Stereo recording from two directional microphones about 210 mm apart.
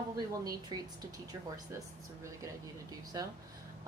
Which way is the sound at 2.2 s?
15° right (ahead or behind).